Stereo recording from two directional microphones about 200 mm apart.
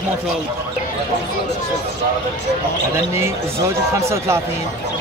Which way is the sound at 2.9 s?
15° right (ahead or behind).